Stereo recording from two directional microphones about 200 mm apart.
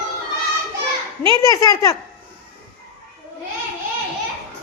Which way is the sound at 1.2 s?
15° left (ahead or behind).